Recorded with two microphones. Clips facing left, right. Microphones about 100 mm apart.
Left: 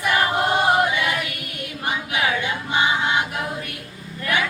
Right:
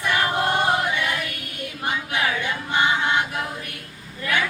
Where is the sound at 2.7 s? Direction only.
15° left (ahead or behind).